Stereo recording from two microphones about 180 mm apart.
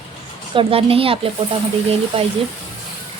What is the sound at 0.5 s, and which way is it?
Speech, 30° right (ahead or behind).